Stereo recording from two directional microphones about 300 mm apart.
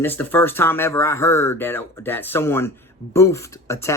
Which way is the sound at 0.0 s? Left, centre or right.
Centre.